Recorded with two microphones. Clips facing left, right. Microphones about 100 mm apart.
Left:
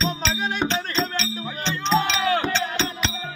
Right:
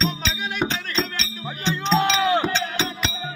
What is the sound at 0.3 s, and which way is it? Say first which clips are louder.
Music: left 3 dB; 35° left (ahead or behind).